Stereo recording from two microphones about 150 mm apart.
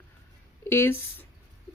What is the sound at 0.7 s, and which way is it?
Speech, 15° left (ahead or behind).